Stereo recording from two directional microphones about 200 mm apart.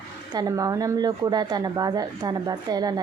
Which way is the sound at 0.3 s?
15° right (ahead or behind).